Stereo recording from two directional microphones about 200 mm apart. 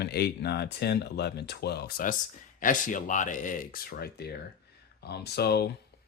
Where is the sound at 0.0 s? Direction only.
55° left (ahead or behind).